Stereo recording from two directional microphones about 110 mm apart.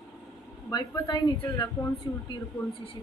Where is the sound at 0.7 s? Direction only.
40° left (ahead or behind).